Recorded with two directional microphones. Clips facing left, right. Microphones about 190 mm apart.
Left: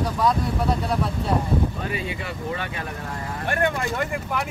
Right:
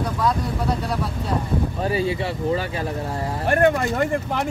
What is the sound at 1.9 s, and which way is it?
Speech, 35° right (ahead or behind).